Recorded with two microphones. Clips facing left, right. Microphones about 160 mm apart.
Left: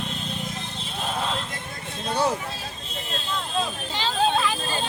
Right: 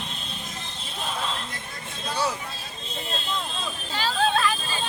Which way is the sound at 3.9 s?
20° left (ahead or behind).